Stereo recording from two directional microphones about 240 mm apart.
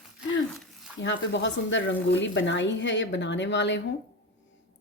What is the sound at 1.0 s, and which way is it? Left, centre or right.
Speech, left.